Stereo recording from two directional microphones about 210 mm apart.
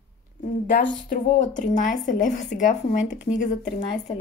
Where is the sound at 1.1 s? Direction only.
35° left (ahead or behind).